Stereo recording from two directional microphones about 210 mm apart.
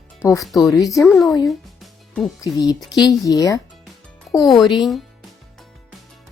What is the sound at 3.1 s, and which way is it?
Speech, 15° left (ahead or behind).